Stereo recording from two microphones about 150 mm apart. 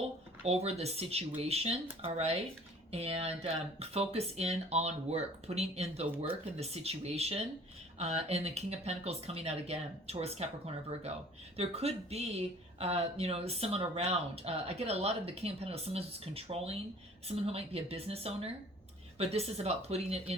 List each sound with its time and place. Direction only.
0.4 s a woman's voice: 45° right (ahead or behind)